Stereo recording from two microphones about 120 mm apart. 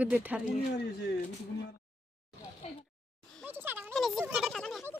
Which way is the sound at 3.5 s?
15° right (ahead or behind).